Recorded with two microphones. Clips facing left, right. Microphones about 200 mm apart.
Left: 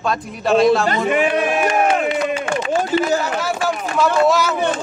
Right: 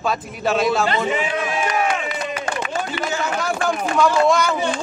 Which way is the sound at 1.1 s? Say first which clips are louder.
Left 6 dB; 60° left (ahead or behind).